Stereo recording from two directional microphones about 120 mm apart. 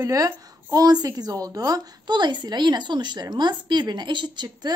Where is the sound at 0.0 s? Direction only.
30° right (ahead or behind).